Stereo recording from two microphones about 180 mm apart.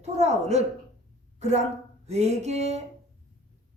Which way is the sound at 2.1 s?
35° right (ahead or behind).